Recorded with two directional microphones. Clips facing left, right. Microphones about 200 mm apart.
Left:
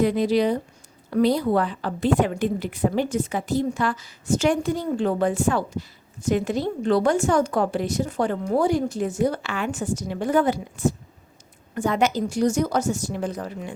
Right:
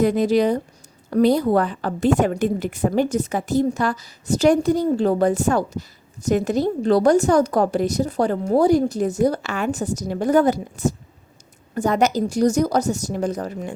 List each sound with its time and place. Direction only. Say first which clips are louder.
0.0 s a woman's voice: right 3 dB; 45° right (ahead or behind)